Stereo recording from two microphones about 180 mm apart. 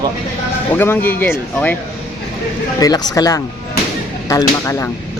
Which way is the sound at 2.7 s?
20° left (ahead or behind).